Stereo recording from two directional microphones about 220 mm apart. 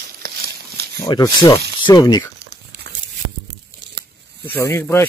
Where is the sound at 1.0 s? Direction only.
20° left (ahead or behind).